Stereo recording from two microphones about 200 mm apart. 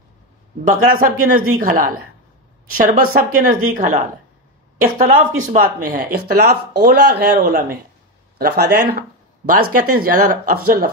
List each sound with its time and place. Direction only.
0.7 s speech: 45° right (ahead or behind)